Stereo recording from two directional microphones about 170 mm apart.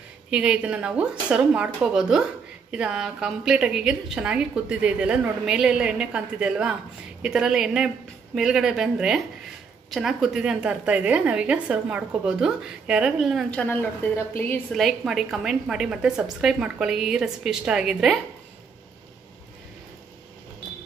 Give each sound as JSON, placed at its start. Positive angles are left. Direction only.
{"t": 0.3, "sound": "a woman's voice", "side_deg": -5}